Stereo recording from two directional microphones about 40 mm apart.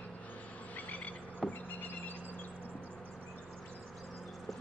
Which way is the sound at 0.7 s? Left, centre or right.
Left.